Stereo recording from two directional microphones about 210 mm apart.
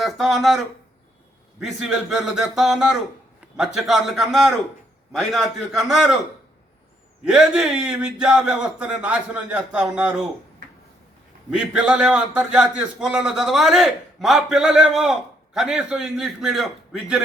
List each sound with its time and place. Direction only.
0.0 s a man's voice: centre (ahead or behind)
7.3 s a man's voice: 5° right (ahead or behind)
11.5 s a man's voice: 5° right (ahead or behind)